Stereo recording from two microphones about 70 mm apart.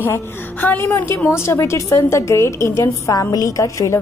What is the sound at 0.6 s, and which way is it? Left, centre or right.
Speech, left.